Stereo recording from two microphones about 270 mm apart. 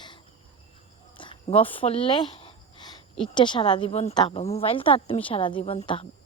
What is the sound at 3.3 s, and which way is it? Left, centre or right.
A woman's voice, centre.